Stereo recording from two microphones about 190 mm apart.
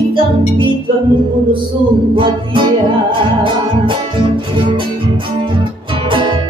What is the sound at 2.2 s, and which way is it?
Music, 25° right (ahead or behind).